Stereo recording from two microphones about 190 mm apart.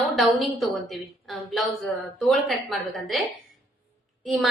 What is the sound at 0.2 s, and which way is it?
A woman's voice, centre (ahead or behind).